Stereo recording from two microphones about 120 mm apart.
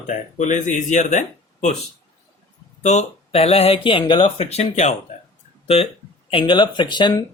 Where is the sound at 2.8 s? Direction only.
70° left (ahead or behind); by 4.0 s 50° left (ahead or behind).